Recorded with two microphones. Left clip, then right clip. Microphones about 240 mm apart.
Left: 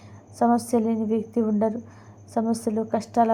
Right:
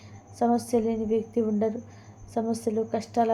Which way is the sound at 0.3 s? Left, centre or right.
Centre.